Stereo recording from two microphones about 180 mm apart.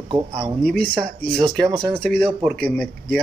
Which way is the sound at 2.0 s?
5° left (ahead or behind).